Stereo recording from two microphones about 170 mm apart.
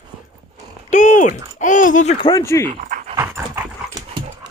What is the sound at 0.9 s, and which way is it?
Speech, 50° left (ahead or behind).